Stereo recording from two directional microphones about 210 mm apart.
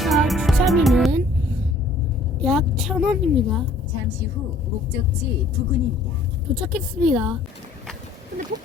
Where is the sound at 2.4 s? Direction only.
Centre (ahead or behind).